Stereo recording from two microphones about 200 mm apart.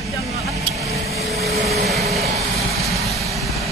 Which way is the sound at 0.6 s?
30° right (ahead or behind).